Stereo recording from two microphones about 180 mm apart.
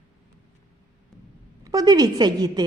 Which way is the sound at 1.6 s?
20° right (ahead or behind).